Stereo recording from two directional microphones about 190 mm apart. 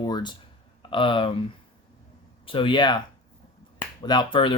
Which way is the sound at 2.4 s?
25° left (ahead or behind).